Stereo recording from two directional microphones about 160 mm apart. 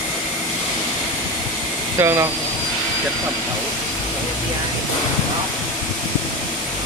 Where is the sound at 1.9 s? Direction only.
15° right (ahead or behind).